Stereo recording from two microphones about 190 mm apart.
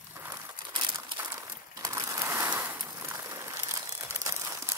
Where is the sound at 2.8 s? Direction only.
15° right (ahead or behind).